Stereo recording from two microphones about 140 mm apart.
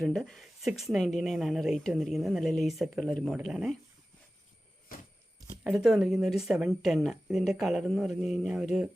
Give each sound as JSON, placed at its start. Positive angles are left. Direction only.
{"t": 0.0, "sound": "speech", "side_deg": 0}
{"t": 5.6, "sound": "speech", "side_deg": 0}